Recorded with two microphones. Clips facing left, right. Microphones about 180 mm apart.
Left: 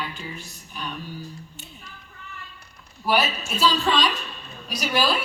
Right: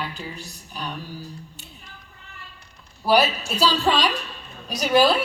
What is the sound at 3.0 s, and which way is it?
A man's voice, 35° right (ahead or behind).